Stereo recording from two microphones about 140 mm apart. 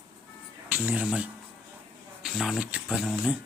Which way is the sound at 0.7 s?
10° right (ahead or behind).